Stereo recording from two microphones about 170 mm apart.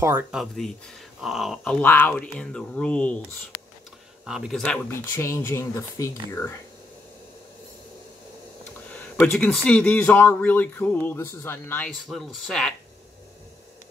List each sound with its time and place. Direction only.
0.0 s speech: 10° right (ahead or behind); by 3.2 s 5° left (ahead or behind)
4.3 s speech: centre (ahead or behind)
4.8 s speech: 15° left (ahead or behind)
8.6 s a sound: 10° left (ahead or behind)
9.2 s speech: 5° left (ahead or behind)
12.1 s speech: centre (ahead or behind)